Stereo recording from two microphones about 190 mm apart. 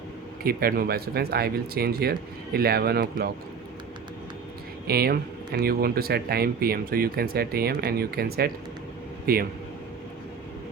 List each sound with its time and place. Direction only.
0.4 s speech: 50° right (ahead or behind)
4.9 s speech: 55° right (ahead or behind)